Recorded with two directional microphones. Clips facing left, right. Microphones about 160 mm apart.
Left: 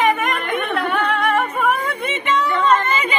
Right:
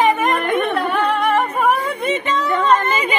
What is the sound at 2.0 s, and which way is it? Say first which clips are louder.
Speech: right 1 dB; 35° right (ahead or behind).